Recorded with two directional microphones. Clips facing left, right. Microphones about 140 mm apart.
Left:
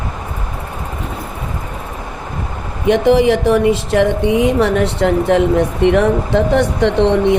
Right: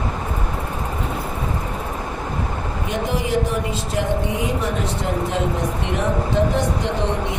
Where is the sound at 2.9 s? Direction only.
75° left (ahead or behind).